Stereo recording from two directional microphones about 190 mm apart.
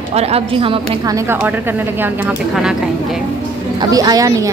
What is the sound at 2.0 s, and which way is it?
Speech, 5° right (ahead or behind).